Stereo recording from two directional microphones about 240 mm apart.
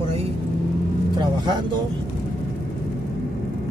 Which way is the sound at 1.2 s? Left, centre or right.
Centre.